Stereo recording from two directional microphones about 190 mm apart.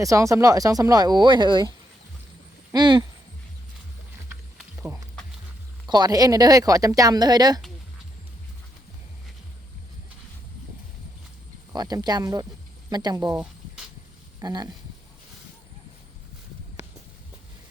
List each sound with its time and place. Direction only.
0.0 s speech: 15° right (ahead or behind)
2.7 s speech: 25° right (ahead or behind)
5.9 s speech: 20° right (ahead or behind)
11.7 s speech: 20° right (ahead or behind)
14.4 s speech: 20° right (ahead or behind)